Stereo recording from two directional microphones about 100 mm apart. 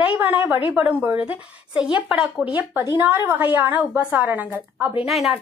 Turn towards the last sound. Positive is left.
turn(degrees=0)  # may be behind; listen again after turning